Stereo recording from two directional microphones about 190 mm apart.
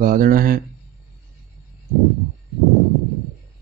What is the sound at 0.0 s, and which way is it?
Speech, 50° right (ahead or behind).